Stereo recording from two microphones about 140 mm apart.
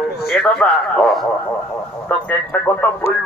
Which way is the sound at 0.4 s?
5° left (ahead or behind).